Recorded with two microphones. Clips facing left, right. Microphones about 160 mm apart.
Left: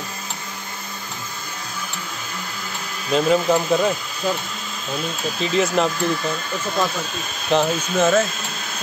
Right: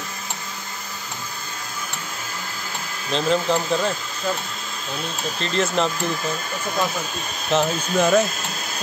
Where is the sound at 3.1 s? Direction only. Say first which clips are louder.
Left 3 dB; 5° left (ahead or behind).